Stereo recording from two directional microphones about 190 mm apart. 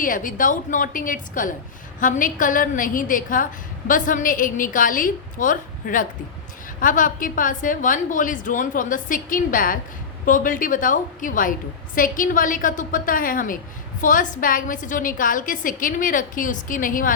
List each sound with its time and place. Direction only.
0.0 s a woman's voice: 45° left (ahead or behind)